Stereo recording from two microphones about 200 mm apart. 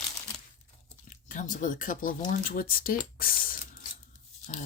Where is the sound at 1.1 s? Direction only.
40° left (ahead or behind).